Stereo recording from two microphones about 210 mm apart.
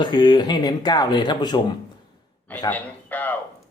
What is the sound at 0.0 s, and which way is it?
Speech, 20° left (ahead or behind).